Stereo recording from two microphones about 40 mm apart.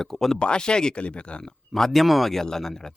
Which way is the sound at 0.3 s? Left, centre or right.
Left.